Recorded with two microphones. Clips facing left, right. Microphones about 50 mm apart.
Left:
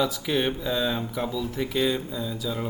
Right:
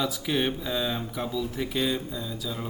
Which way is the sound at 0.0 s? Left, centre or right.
Centre.